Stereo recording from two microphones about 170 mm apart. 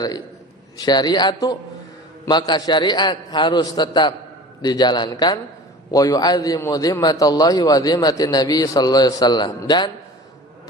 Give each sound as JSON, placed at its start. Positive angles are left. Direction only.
{"t": 0.8, "sound": "a man's voice", "side_deg": 25}